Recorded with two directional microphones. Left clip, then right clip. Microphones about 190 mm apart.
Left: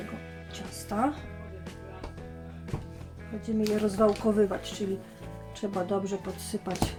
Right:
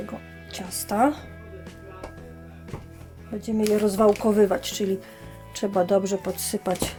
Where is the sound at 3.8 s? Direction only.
45° right (ahead or behind).